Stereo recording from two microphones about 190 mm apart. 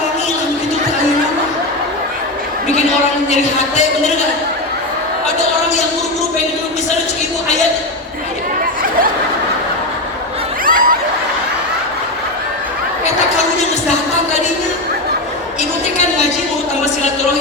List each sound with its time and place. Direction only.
10.7 s snicker: 50° right (ahead or behind)